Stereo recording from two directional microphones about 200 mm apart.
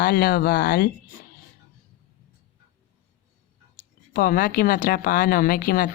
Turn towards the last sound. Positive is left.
turn(degrees=45)  # may be behind; listen again after turning